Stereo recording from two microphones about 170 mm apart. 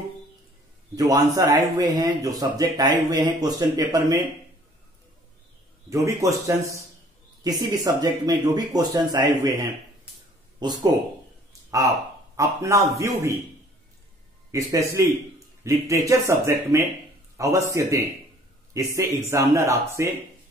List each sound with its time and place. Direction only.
0.9 s a man's voice: 20° right (ahead or behind)
5.9 s a man's voice: 20° right (ahead or behind)
12.4 s a man's voice: 20° right (ahead or behind)
14.5 s a man's voice: 20° right (ahead or behind)